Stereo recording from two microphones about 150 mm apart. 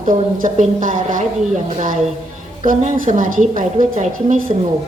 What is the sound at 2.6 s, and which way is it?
A woman's voice, 60° right (ahead or behind).